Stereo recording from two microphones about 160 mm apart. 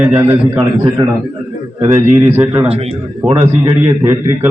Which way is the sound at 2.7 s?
40° right (ahead or behind).